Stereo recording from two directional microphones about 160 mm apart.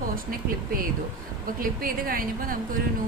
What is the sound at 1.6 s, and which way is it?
Speech, 60° right (ahead or behind).